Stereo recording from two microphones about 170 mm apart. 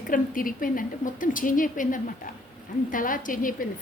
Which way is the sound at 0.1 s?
55° left (ahead or behind).